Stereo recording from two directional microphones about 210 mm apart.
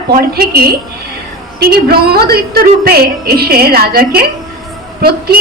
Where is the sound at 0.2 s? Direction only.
45° right (ahead or behind).